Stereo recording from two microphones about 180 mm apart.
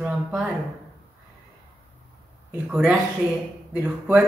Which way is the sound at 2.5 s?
5° right (ahead or behind).